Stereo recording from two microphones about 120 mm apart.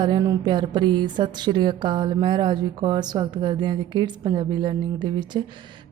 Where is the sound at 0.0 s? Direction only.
35° right (ahead or behind).